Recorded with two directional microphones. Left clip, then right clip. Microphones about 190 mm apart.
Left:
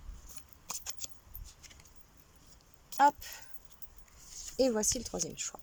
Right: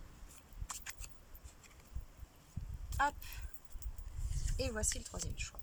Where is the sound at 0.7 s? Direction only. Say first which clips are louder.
Left 5 dB; 25° left (ahead or behind).